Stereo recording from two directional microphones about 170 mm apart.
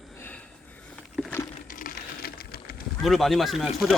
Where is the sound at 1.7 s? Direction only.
60° left (ahead or behind).